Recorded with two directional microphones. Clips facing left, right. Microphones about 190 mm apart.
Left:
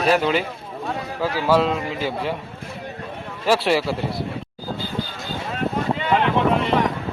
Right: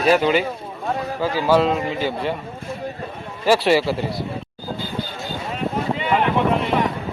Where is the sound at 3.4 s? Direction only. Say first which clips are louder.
Right 3 dB; centre (ahead or behind).